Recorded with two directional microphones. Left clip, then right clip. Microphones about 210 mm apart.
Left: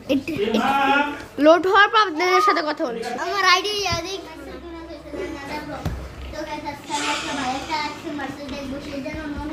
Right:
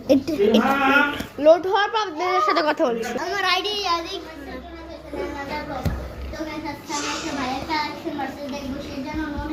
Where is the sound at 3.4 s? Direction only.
45° left (ahead or behind).